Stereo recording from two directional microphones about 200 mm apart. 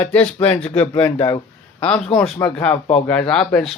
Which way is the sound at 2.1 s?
5° left (ahead or behind).